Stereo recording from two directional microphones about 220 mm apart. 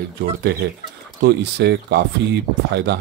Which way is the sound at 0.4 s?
50° right (ahead or behind).